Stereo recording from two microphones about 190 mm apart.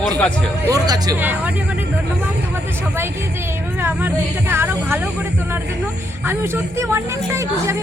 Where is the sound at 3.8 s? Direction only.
10° right (ahead or behind).